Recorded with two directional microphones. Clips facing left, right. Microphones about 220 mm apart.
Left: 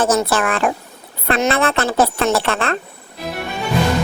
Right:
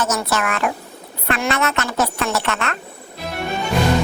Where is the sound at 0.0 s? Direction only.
30° left (ahead or behind).